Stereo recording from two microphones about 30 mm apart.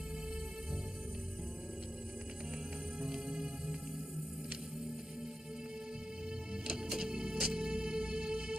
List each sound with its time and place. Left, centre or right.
3.0 s music: right
6.7 s music: right